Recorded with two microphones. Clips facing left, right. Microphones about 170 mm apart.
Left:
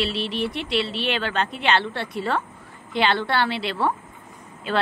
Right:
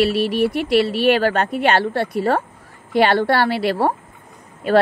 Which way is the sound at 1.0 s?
50° right (ahead or behind).